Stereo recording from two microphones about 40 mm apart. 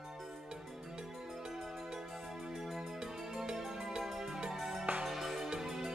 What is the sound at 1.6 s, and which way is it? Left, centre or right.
Music, centre.